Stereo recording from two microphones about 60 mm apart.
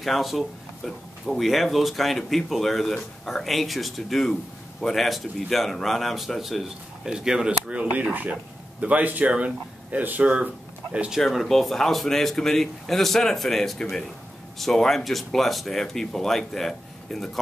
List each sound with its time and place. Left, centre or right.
0.0 s speech: centre
7.1 s speech: centre
8.1 s speech: right
11.1 s speech: centre